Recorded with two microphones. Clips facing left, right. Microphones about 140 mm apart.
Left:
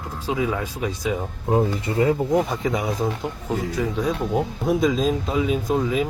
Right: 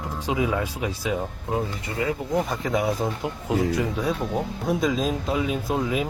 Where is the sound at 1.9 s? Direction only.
25° left (ahead or behind).